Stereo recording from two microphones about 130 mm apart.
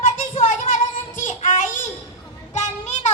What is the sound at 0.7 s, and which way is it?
Music, 80° left.